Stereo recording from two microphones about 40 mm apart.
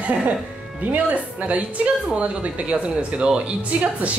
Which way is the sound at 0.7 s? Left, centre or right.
Right.